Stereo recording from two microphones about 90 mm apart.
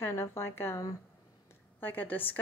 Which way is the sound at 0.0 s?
30° left (ahead or behind).